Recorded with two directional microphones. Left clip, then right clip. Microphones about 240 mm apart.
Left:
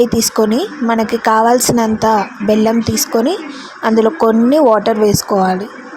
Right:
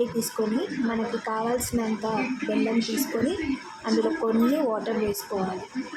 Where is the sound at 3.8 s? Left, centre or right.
Left.